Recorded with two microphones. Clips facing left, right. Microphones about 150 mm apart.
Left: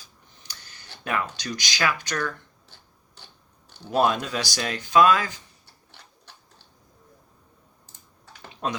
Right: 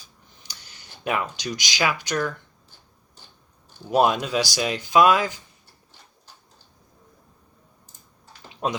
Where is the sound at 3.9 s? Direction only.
15° right (ahead or behind).